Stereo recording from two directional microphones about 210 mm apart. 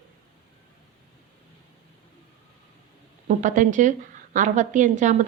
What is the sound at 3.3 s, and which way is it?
A woman's voice, 35° right (ahead or behind).